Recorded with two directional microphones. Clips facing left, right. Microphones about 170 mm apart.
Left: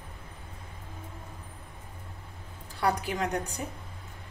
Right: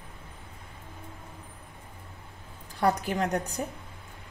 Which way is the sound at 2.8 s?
40° right (ahead or behind).